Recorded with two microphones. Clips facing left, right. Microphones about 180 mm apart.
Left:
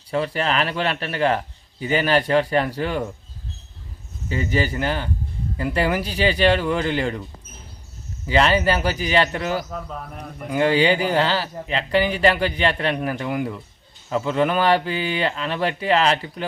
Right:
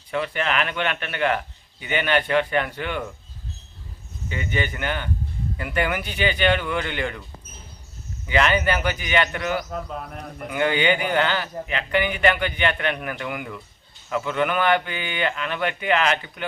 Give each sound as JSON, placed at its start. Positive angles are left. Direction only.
{"t": 0.1, "sound": "speech", "side_deg": 35}
{"t": 4.3, "sound": "speech", "side_deg": 35}
{"t": 8.3, "sound": "speech", "side_deg": 30}